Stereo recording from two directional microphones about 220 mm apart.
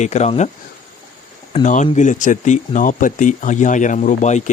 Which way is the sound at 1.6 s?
35° left (ahead or behind).